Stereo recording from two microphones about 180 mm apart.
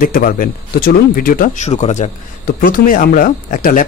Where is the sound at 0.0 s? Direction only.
50° left (ahead or behind).